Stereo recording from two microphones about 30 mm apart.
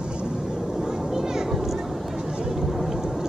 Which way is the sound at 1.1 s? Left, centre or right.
Centre.